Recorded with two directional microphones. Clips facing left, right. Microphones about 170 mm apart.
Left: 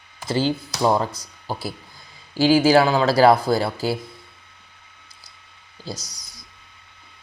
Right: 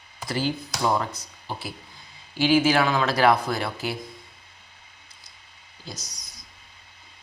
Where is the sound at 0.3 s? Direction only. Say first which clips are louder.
Left 5 dB; 30° left (ahead or behind).